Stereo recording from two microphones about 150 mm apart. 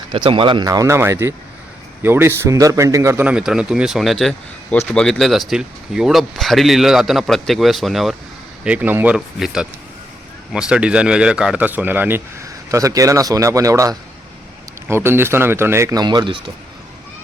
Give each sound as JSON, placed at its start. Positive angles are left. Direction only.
{"t": 0.1, "sound": "a man's voice", "side_deg": -35}